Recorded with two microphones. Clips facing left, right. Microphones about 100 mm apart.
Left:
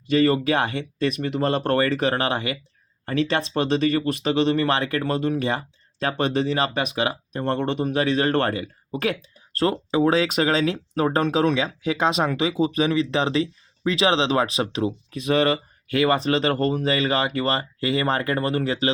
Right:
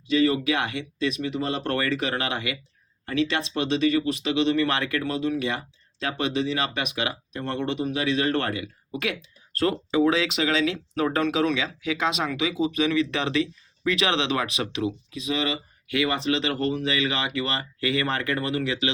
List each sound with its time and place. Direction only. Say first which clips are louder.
0.1 s speech: left 3 dB; 50° left (ahead or behind); by 14.9 s 35° left (ahead or behind)
15.1 s speech: left 7 dB; 55° left (ahead or behind); by 18.9 s 40° left (ahead or behind)